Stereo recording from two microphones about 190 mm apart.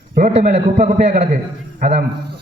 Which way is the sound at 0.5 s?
35° right (ahead or behind).